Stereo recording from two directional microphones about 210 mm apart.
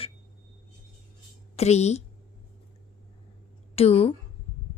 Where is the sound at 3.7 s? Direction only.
30° left (ahead or behind).